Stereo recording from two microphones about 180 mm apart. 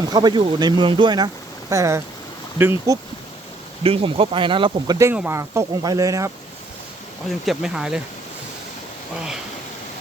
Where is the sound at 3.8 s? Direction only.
30° right (ahead or behind).